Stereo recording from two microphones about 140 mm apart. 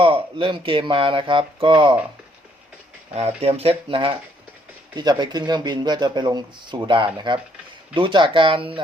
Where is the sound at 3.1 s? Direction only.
50° right (ahead or behind).